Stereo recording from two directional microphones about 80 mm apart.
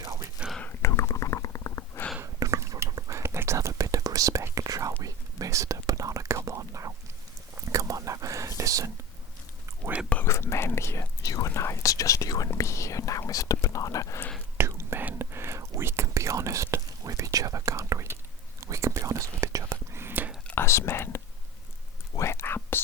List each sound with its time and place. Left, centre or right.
0.6 s stomach rumble: left
2.2 s whispering: right
10.2 s whispering: left
14.6 s whispering: right
20.6 s whispering: left